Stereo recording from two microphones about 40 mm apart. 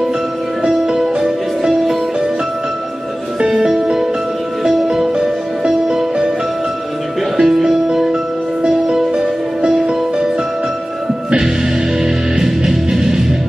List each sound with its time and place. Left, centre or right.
0.7 s music: centre
3.5 s music: centre
7.4 s music: centre
12.0 s music: centre